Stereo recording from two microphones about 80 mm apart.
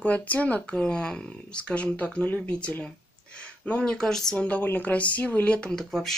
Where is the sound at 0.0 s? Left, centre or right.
Centre.